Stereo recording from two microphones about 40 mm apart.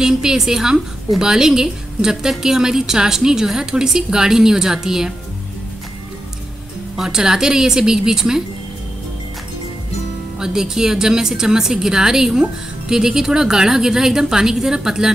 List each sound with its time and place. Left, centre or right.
0.0 s a woman's voice: centre
7.0 s a woman's voice: centre
10.4 s a woman's voice: centre